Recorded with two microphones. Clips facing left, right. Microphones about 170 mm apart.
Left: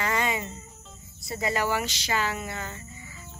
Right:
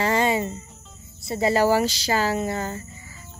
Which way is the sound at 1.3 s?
30° right (ahead or behind).